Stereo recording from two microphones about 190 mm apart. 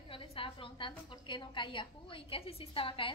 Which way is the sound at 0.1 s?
30° left (ahead or behind).